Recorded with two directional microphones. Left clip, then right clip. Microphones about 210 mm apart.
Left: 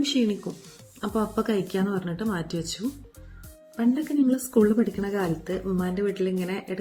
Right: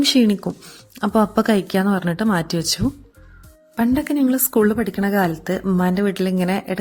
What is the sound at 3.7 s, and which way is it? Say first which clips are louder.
Speech: right 5 dB; 50° right (ahead or behind).